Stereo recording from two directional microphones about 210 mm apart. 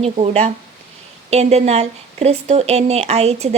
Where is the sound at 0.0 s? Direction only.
30° right (ahead or behind).